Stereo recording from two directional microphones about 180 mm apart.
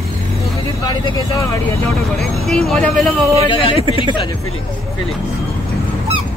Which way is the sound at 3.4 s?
25° left (ahead or behind).